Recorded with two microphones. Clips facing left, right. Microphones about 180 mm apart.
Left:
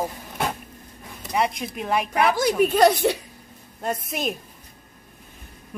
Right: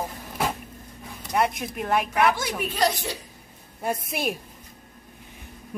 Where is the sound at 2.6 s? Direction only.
50° left (ahead or behind).